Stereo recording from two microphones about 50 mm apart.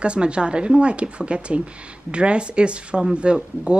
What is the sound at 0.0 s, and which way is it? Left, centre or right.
Speech, right.